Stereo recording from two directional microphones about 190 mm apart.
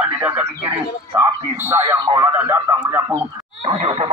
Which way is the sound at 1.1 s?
10° right (ahead or behind).